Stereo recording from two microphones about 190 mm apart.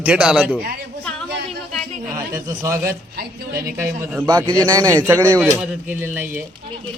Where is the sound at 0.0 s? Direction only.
5° right (ahead or behind).